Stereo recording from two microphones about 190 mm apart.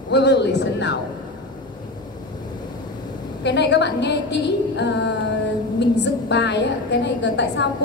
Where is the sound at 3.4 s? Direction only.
65° left (ahead or behind).